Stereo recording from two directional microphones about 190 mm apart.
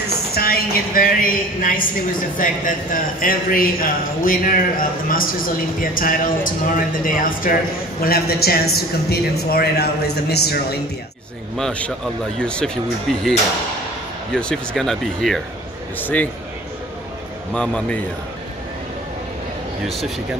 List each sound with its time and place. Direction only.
0.3 s a woman's voice: 55° left (ahead or behind)
11.5 s speech: 5° left (ahead or behind)
14.3 s speech: 5° left (ahead or behind)
17.6 s speech: 5° left (ahead or behind)